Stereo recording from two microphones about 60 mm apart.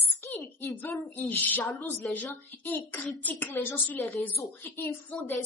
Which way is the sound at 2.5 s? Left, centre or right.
Left.